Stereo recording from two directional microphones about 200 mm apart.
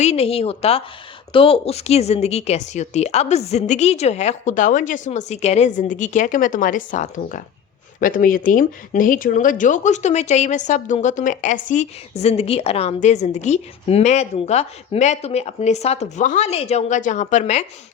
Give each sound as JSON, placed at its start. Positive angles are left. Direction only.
{"t": 0.0, "sound": "a woman's voice", "side_deg": 30}